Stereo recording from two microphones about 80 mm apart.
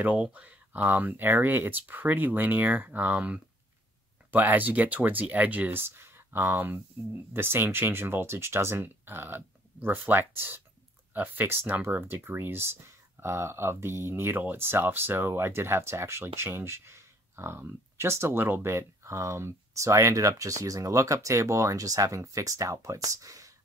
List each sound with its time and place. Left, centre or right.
0.0 s speech: centre; by 23.5 s right